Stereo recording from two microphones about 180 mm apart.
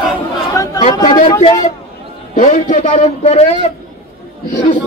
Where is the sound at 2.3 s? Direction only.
45° left (ahead or behind).